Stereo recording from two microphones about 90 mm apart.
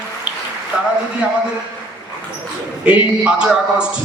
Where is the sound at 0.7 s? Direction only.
15° right (ahead or behind).